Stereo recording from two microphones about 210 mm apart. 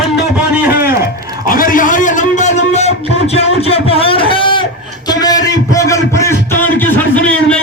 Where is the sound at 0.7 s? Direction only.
45° left (ahead or behind); by 4.6 s 25° left (ahead or behind).